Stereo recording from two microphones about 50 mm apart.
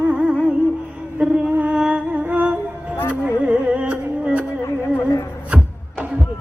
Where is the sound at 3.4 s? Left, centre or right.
Right.